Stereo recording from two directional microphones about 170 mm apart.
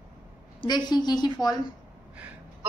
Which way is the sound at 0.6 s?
25° left (ahead or behind).